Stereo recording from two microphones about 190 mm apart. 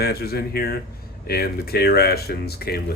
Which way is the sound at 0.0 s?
55° left (ahead or behind).